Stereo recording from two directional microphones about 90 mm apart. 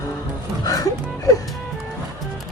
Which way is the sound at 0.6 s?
40° left (ahead or behind).